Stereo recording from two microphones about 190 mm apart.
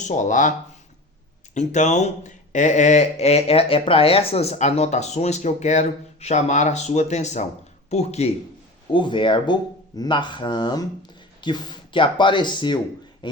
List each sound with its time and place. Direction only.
0.0 s speech: 40° left (ahead or behind)
1.5 s speech: 40° left (ahead or behind); by 13.4 s 25° left (ahead or behind)